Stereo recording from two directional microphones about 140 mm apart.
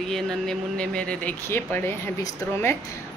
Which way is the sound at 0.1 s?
5° left (ahead or behind).